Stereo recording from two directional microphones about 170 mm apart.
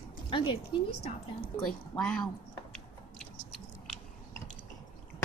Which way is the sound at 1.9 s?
5° left (ahead or behind).